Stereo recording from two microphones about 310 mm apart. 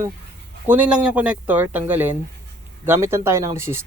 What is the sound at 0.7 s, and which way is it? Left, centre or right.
Speech, centre.